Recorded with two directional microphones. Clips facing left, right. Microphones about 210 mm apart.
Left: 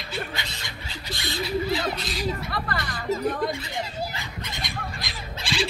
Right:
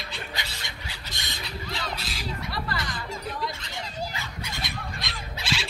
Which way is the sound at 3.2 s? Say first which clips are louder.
Left 7 dB; 50° left (ahead or behind).